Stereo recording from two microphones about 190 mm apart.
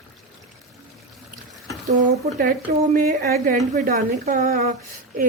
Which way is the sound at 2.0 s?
50° right (ahead or behind).